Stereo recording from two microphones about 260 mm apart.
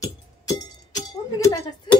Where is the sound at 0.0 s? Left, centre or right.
Centre.